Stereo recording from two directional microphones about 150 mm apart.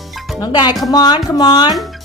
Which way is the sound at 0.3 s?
25° left (ahead or behind).